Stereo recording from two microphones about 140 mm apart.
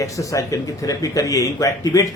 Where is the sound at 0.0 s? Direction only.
25° left (ahead or behind).